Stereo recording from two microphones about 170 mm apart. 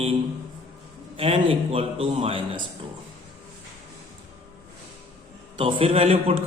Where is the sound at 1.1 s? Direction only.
35° right (ahead or behind).